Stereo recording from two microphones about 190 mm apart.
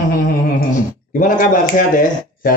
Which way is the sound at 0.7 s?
45° left (ahead or behind).